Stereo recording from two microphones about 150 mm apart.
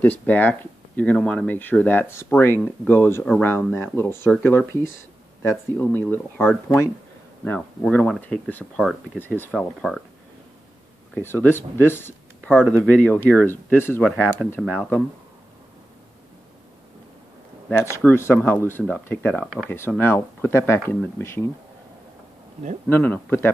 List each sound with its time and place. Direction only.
0.0 s speech: 10° left (ahead or behind)
8.7 s speech: centre (ahead or behind)
9.2 s speech: 10° left (ahead or behind)
11.1 s speech: 15° left (ahead or behind)
17.7 s speech: 15° left (ahead or behind)
22.8 s speech: 15° left (ahead or behind)